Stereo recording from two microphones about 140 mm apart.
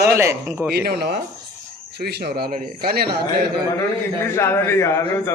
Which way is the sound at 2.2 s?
90° right.